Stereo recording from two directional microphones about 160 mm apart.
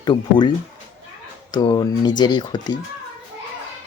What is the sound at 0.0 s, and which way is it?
Speech, 30° left (ahead or behind).